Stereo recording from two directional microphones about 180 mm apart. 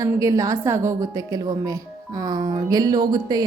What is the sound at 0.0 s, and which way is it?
A woman's voice, 20° right (ahead or behind).